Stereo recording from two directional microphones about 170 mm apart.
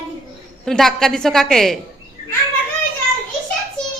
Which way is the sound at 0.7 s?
Centre (ahead or behind).